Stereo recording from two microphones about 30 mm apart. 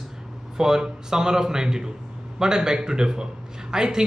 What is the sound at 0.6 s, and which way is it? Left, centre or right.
Speech, centre.